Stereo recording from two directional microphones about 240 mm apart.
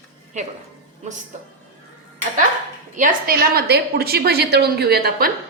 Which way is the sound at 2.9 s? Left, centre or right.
Right.